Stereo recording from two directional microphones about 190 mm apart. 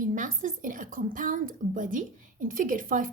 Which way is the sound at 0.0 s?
45° right (ahead or behind).